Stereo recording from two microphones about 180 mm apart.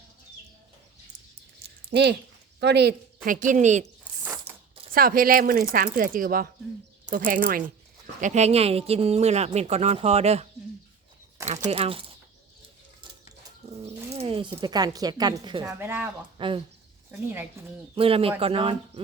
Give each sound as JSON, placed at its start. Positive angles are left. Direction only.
{"t": 1.9, "sound": "speech", "side_deg": -65}
{"t": 3.2, "sound": "speech", "side_deg": -45}
{"t": 4.2, "sound": "ratchet", "side_deg": -15}
{"t": 4.9, "sound": "speech", "side_deg": -55}
{"t": 8.2, "sound": "speech", "side_deg": -40}
{"t": 11.7, "sound": "speech", "side_deg": -30}
{"t": 13.6, "sound": "bird", "side_deg": -35}
{"t": 14.2, "sound": "zipper", "side_deg": -30}
{"t": 14.6, "sound": "a woman's voice", "side_deg": -20}
{"t": 16.4, "sound": "a woman's voice", "side_deg": -30}
{"t": 17.1, "sound": "speech", "side_deg": -10}
{"t": 17.9, "sound": "speech", "side_deg": -30}